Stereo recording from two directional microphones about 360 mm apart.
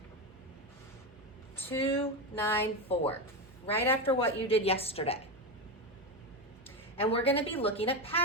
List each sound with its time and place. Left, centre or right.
1.5 s a woman's voice: centre
6.7 s a woman's voice: centre